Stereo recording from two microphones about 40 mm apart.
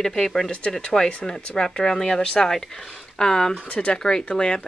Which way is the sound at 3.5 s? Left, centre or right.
Left.